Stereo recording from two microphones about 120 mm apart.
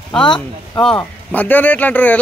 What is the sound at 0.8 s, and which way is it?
Speech, 10° left (ahead or behind).